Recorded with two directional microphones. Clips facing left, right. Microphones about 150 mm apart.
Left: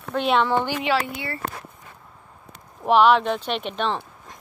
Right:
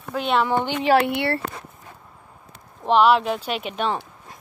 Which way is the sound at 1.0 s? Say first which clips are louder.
Right 8 dB; 70° right (ahead or behind).